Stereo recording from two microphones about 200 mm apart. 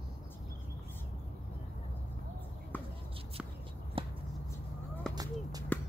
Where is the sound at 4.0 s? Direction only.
25° right (ahead or behind).